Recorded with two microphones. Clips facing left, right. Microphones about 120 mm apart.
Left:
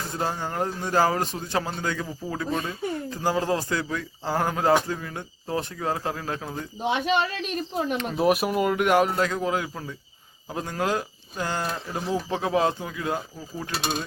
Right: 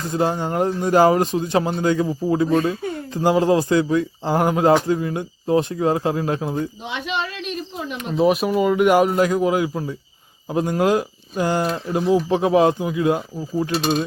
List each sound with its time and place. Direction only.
0.1 s speech: 20° right (ahead or behind)
6.8 s speech: 45° left (ahead or behind)
8.1 s speech: 5° left (ahead or behind); by 13.7 s 15° right (ahead or behind)